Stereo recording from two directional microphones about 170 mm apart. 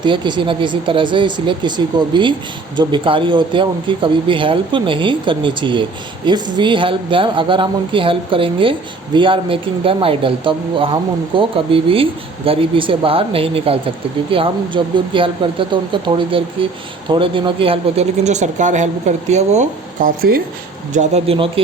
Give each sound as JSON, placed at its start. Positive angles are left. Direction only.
{"t": 0.0, "sound": "speech", "side_deg": -25}
{"t": 21.3, "sound": "speech", "side_deg": -30}